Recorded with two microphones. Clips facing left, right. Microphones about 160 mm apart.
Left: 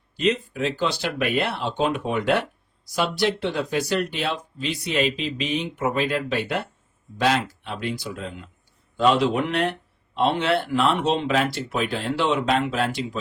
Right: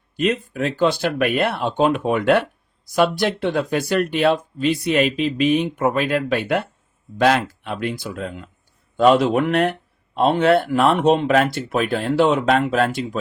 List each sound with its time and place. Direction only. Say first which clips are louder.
0.2 s speech: right 2 dB; 50° right (ahead or behind)